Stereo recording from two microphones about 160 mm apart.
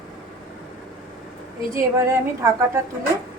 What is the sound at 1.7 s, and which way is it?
A woman's voice, 20° right (ahead or behind).